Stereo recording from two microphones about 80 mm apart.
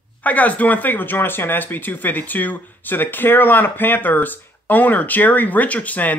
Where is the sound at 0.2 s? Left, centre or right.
Centre.